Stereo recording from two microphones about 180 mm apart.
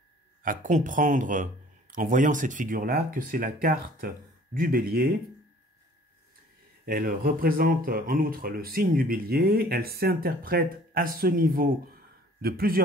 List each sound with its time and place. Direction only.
0.4 s speech: 50° right (ahead or behind)
6.9 s speech: 55° right (ahead or behind)